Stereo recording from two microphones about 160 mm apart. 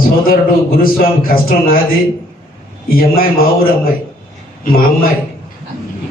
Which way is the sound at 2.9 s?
65° left (ahead or behind).